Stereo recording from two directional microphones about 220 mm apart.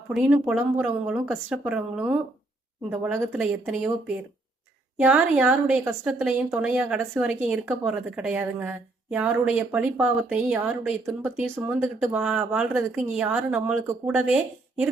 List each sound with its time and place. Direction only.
0.1 s a woman's voice: 5° right (ahead or behind)